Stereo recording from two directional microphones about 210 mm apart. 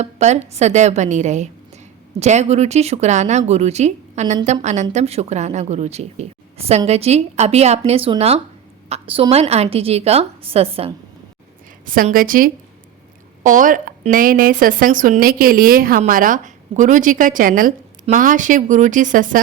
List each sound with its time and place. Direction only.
0.0 s a woman's voice: 30° right (ahead or behind)
11.9 s a woman's voice: 40° right (ahead or behind)